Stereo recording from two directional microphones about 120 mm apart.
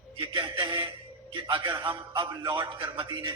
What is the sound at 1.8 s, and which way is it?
Speech, 45° right (ahead or behind).